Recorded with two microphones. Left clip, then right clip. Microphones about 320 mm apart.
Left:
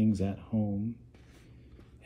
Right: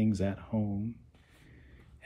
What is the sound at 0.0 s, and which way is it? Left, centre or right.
Speech, centre.